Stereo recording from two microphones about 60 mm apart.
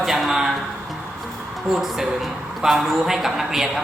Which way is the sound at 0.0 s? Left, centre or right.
Centre.